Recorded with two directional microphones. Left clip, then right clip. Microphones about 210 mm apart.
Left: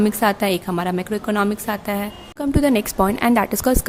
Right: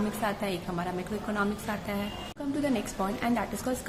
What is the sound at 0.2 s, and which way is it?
A woman's voice, 55° left (ahead or behind).